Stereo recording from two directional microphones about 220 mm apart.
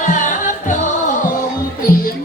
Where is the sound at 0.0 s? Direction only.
35° left (ahead or behind).